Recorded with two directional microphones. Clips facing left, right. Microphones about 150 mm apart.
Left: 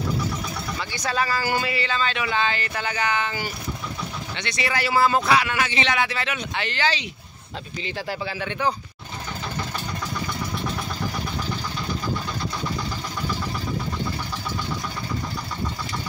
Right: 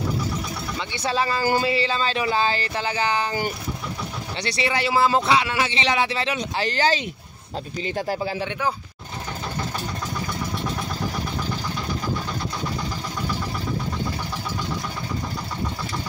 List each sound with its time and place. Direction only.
0.7 s speech: 25° right (ahead or behind)
8.5 s speech: 5° right (ahead or behind)